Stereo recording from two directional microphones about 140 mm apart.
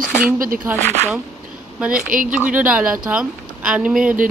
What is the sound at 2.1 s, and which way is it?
Speech, 75° right (ahead or behind).